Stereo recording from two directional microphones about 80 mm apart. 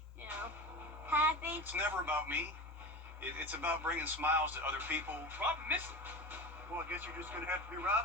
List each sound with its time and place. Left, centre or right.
1.0 s a sound: right
3.3 s speech: right
6.8 s speech: right